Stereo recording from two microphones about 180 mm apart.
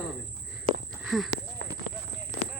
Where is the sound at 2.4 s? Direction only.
35° left (ahead or behind).